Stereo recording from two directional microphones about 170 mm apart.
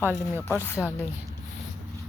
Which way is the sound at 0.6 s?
15° left (ahead or behind).